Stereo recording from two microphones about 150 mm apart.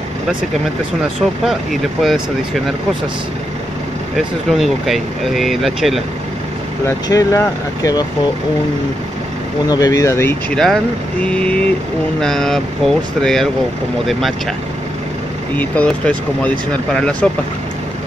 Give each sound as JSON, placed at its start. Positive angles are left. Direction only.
{"t": 1.4, "sound": "speech", "side_deg": 0}
{"t": 4.5, "sound": "speech", "side_deg": 0}
{"t": 6.9, "sound": "speech", "side_deg": 20}
{"t": 9.7, "sound": "speech", "side_deg": 25}
{"t": 10.5, "sound": "speech", "side_deg": 5}
{"t": 15.5, "sound": "speech", "side_deg": 10}